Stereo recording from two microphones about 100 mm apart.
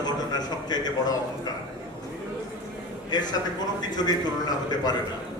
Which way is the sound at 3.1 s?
45° left (ahead or behind).